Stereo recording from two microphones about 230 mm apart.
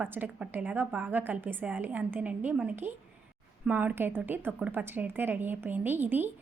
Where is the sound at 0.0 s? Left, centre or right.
Centre.